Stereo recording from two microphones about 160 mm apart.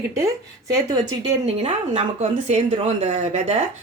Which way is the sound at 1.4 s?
40° right (ahead or behind).